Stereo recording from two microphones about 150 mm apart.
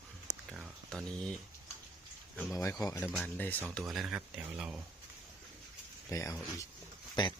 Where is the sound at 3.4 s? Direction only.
10° left (ahead or behind).